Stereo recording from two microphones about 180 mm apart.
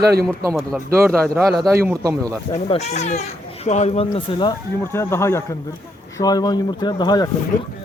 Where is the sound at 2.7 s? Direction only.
35° left (ahead or behind).